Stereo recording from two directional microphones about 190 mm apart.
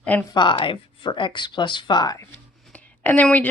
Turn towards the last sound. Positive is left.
turn(degrees=10)  # may be behind; listen again after turning